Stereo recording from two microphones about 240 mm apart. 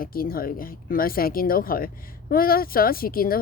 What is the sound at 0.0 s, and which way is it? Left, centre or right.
Speech, left.